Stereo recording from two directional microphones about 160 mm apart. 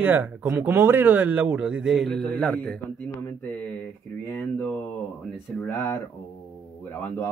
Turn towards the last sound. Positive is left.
turn(degrees=10)  # may be behind; listen again after turning